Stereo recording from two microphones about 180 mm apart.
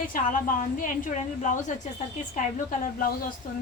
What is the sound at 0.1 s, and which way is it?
A woman's voice, 45° left (ahead or behind).